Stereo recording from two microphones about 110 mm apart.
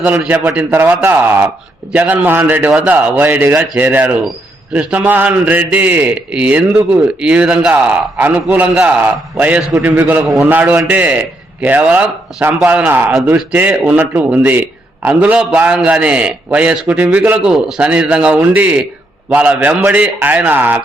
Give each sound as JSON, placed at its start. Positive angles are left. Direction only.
{"t": 0.0, "sound": "a man's voice", "side_deg": -15}
{"t": 7.7, "sound": "a man's voice", "side_deg": -15}